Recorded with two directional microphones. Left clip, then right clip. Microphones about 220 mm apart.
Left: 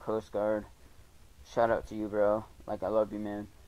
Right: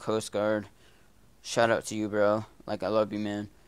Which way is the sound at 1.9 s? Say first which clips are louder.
Right 3 dB; 35° right (ahead or behind).